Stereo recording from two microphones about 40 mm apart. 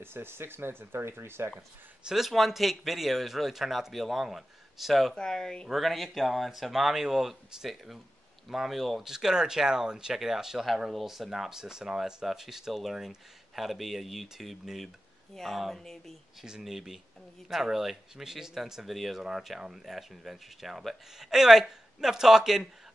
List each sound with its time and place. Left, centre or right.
0.0 s speech: right
2.0 s speech: centre
5.1 s speech: centre
5.7 s speech: centre
16.6 s speech: centre